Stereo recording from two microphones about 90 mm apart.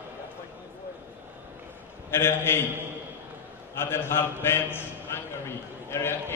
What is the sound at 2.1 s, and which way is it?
Speech, 25° left (ahead or behind).